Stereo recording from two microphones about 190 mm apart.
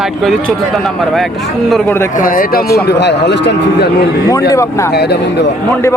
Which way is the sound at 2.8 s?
60° left (ahead or behind).